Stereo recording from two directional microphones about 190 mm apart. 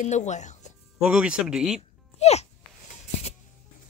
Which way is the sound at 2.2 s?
35° left (ahead or behind).